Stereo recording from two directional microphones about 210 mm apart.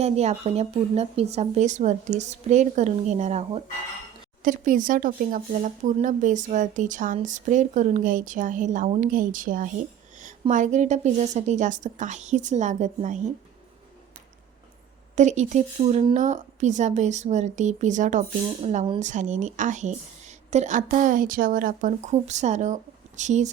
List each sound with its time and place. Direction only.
0.0 s speech: 30° right (ahead or behind)
15.1 s speech: 35° right (ahead or behind)